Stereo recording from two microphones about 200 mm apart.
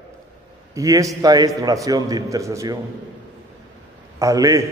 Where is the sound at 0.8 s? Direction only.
15° right (ahead or behind).